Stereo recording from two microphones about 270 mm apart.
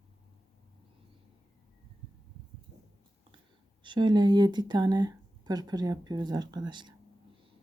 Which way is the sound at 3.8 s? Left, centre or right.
Centre.